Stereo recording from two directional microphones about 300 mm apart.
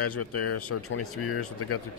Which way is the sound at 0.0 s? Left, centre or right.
Left.